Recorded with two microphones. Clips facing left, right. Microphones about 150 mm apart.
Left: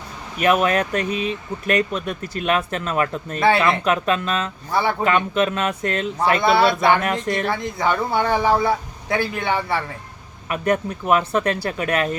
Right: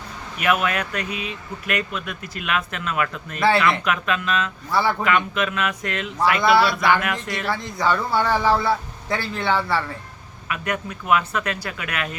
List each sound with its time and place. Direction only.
0.4 s speech: 35° left (ahead or behind)
3.4 s speech: 20° left (ahead or behind)
4.7 s speech: 20° left (ahead or behind)
5.0 s speech: 35° left (ahead or behind)
7.3 s speech: 50° left (ahead or behind)
7.8 s a man's voice: 20° left (ahead or behind)
10.5 s speech: 40° left (ahead or behind)